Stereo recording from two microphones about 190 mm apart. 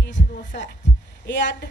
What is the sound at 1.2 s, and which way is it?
Speech, 65° left (ahead or behind).